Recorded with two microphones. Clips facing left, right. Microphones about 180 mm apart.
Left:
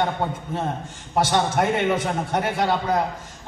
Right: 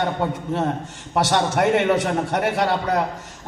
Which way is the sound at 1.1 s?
75° right (ahead or behind).